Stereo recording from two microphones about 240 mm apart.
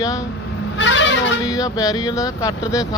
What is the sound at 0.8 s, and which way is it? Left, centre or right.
Vehicle, left.